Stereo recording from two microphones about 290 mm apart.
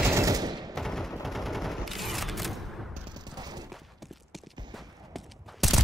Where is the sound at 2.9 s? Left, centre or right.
Centre.